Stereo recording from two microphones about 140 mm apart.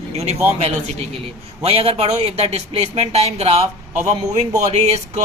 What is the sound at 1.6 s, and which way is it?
A man's voice, 45° right (ahead or behind).